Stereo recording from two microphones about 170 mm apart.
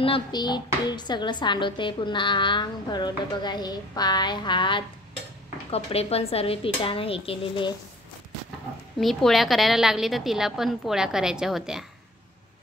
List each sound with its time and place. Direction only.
0.0 s a woman's voice: 30° left (ahead or behind)
9.0 s a woman's voice: centre (ahead or behind)